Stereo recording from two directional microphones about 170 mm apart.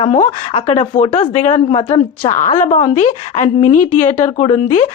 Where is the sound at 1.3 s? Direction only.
40° left (ahead or behind).